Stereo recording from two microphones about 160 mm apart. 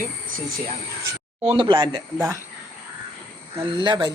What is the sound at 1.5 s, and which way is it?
Speech, 25° right (ahead or behind).